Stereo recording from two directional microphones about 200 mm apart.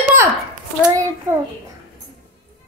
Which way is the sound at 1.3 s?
10° right (ahead or behind).